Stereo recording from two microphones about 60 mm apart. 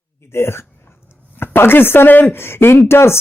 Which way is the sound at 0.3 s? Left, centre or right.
Left.